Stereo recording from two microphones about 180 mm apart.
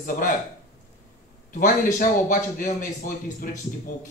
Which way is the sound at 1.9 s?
50° left (ahead or behind).